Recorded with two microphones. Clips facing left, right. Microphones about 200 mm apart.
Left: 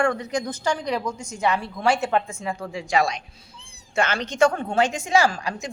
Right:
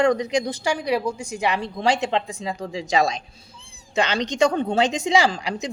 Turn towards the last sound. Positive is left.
turn(degrees=-20)  # may be behind; listen again after turning